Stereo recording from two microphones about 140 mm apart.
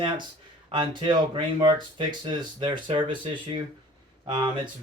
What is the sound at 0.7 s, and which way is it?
Speech, 35° right (ahead or behind).